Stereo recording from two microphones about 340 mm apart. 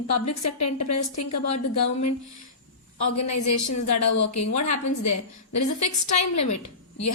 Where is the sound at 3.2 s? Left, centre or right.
Left.